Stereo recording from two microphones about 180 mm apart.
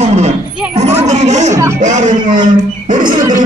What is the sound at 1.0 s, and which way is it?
Speech, 40° right (ahead or behind).